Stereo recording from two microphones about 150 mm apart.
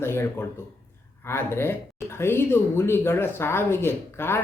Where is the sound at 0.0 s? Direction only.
15° left (ahead or behind).